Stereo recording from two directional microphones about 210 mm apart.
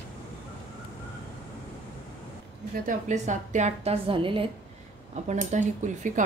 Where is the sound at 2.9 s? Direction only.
35° right (ahead or behind).